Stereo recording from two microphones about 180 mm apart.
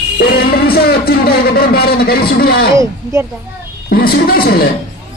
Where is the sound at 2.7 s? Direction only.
15° right (ahead or behind).